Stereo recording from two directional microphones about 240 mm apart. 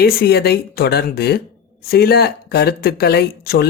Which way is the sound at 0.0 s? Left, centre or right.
Left.